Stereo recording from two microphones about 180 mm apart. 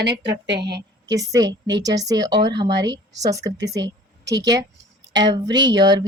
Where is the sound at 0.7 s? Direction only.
25° right (ahead or behind).